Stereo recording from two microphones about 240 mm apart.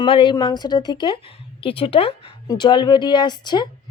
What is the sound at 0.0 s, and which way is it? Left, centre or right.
Speech, left.